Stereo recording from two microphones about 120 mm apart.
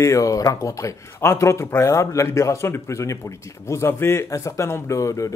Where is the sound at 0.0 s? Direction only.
25° left (ahead or behind).